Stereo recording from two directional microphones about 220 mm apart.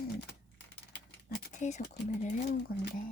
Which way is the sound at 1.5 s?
30° left (ahead or behind).